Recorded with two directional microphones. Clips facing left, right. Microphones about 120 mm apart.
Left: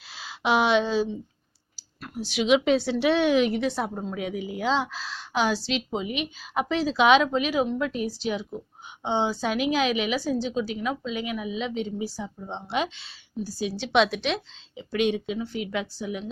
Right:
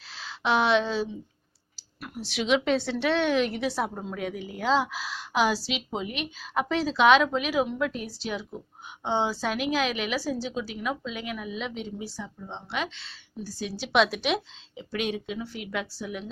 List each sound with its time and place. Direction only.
0.1 s a woman's voice: 5° left (ahead or behind)
3.9 s a woman's voice: 5° left (ahead or behind)
12.2 s a woman's voice: 20° left (ahead or behind); by 16.2 s centre (ahead or behind)